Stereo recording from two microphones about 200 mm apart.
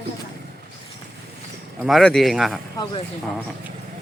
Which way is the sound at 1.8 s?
Centre (ahead or behind).